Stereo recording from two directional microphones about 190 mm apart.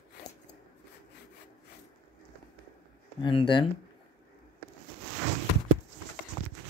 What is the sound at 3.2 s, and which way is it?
Speech, 25° left (ahead or behind).